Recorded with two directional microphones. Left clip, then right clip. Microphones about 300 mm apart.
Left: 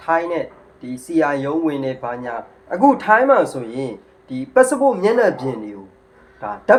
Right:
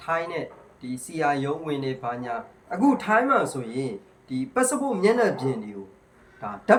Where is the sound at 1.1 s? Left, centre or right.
Centre.